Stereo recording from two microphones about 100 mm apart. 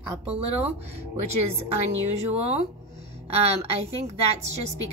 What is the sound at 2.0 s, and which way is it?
Speech, 90° right.